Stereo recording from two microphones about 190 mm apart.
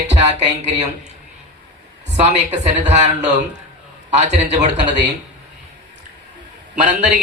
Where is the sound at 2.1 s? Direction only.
40° right (ahead or behind).